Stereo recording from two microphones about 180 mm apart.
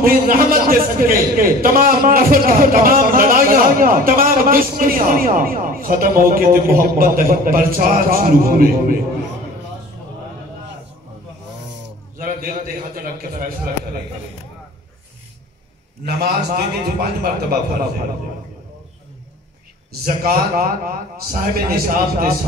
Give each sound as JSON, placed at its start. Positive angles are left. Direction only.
{"t": 0.0, "sound": "a man's voice", "side_deg": -55}
{"t": 12.2, "sound": "a man's voice", "side_deg": -50}
{"t": 16.1, "sound": "a man's voice", "side_deg": -60}
{"t": 20.2, "sound": "a man's voice", "side_deg": -55}